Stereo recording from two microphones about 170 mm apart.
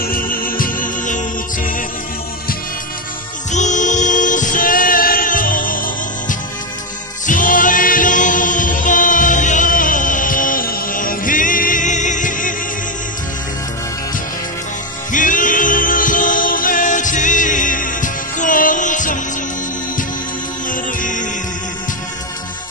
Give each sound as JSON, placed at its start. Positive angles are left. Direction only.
{"t": 0.0, "sound": "music", "side_deg": 55}
{"t": 3.5, "sound": "music", "side_deg": 45}
{"t": 15.1, "sound": "music", "side_deg": 50}
{"t": 20.7, "sound": "music", "side_deg": 50}